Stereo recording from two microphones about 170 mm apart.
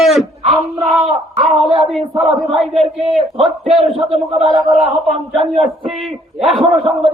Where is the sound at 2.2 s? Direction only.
35° right (ahead or behind).